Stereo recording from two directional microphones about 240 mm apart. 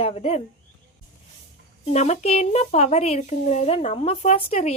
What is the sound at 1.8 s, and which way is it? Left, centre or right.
A woman's voice, left.